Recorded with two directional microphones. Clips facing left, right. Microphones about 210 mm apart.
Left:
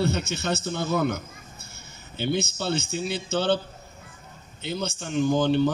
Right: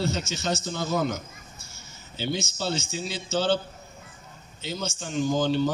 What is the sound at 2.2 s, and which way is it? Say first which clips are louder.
Speech: left 3 dB; 60° left (ahead or behind).